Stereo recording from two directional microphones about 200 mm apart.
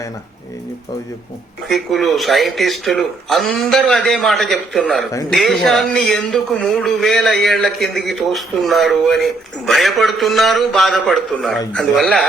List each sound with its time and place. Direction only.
1.6 s a man's voice: centre (ahead or behind)